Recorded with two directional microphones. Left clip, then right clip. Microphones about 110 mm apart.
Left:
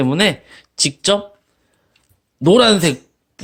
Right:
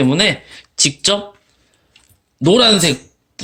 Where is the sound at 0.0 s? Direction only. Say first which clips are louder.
Right 2 dB; 45° left (ahead or behind).